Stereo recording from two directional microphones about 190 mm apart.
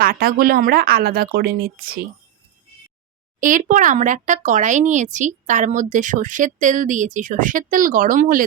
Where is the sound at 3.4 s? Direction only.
45° right (ahead or behind).